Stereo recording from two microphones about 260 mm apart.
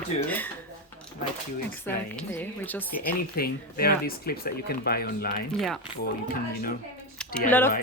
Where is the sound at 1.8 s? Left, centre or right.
Centre.